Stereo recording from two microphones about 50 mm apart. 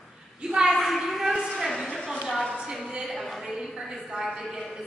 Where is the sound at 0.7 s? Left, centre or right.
Centre.